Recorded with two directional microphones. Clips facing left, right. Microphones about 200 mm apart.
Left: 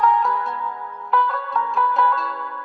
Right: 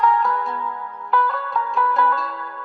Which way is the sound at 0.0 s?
Centre (ahead or behind).